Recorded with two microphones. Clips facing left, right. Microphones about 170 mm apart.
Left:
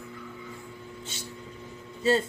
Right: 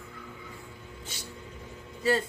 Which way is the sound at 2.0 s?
25° left (ahead or behind).